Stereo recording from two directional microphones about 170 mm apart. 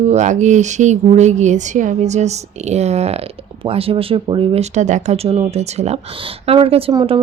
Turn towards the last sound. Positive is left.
turn(degrees=-30)  # may be behind; listen again after turning